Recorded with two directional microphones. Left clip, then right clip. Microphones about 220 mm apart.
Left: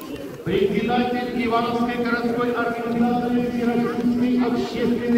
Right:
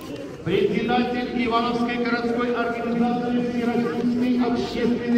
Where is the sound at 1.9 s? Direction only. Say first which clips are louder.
Left 1 dB; 50° right (ahead or behind).